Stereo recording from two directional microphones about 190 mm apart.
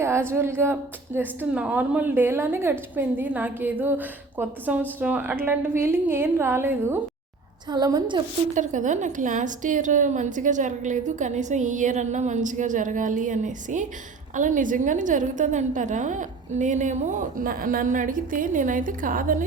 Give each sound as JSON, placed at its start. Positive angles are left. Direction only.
{"t": 0.0, "sound": "a woman's voice", "side_deg": -15}
{"t": 8.5, "sound": "a woman's voice", "side_deg": -40}